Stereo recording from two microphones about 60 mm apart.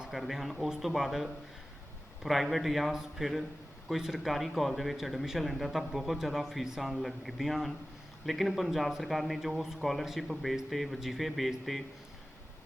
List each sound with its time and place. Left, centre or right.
0.1 s speech: centre